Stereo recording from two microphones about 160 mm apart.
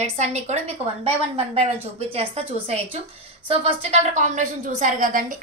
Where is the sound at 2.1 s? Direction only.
35° right (ahead or behind).